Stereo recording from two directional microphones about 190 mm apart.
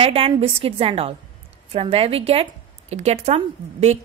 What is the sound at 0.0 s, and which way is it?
A woman's voice, 30° right (ahead or behind).